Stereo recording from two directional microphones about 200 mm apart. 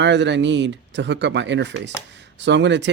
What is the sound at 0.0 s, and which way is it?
Speech, 60° right (ahead or behind).